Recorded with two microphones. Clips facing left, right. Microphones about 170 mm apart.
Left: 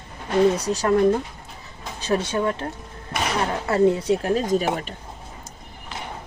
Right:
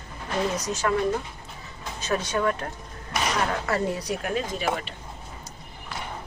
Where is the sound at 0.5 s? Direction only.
35° left (ahead or behind).